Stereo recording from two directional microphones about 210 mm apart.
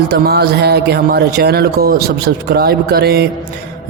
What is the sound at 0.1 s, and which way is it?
Music, 50° right (ahead or behind).